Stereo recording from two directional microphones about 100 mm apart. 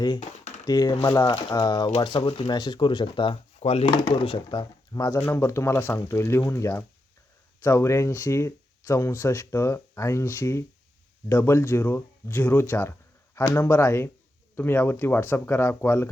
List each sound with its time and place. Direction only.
0.7 s speech: 40° left (ahead or behind)
2.0 s speech: 60° left (ahead or behind)
2.5 s speech: 45° left (ahead or behind); by 3.9 s 90° left
3.9 s speech: 50° left (ahead or behind)
4.9 s speech: 30° left (ahead or behind)